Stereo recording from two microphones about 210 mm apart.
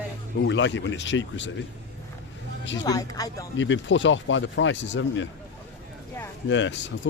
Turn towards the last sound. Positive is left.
turn(degrees=60)  # may be behind; listen again after turning